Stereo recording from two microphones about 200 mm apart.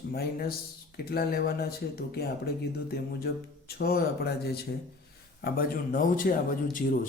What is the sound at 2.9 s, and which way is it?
A man's voice, 50° left (ahead or behind).